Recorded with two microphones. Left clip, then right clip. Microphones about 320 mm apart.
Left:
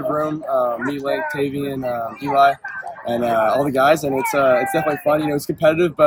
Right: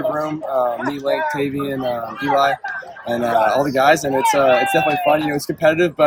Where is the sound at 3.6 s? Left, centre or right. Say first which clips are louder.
Right 1 dB; centre.